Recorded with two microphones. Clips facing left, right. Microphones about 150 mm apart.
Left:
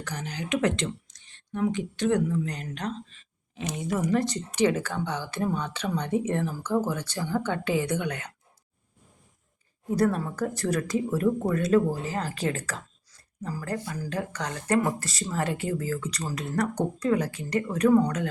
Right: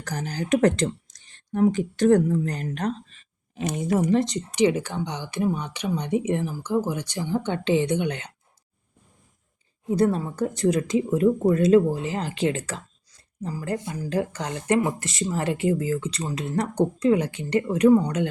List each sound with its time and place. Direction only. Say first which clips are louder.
0.0 s speech: right 4 dB; 40° right (ahead or behind)
4.0 s speech: right 4 dB; 25° right (ahead or behind)
9.9 s speech: right 3 dB; 20° right (ahead or behind)